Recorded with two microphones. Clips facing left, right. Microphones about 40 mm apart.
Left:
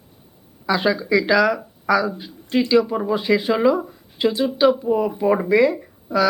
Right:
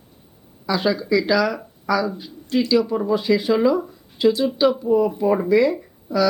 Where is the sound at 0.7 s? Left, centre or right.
Centre.